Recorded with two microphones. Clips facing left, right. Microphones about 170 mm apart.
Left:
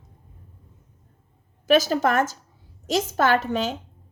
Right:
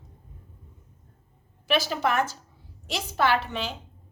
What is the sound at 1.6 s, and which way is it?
Speech, 45° left (ahead or behind).